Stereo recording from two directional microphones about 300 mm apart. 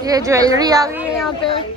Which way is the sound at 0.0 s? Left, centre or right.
Centre.